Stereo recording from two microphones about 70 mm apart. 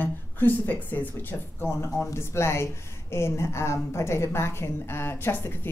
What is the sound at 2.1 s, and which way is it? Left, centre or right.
A woman's voice, left.